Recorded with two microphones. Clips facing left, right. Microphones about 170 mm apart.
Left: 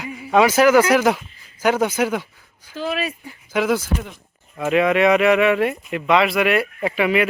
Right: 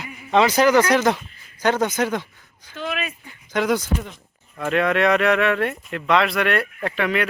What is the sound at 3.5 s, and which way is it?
Speech, 5° left (ahead or behind).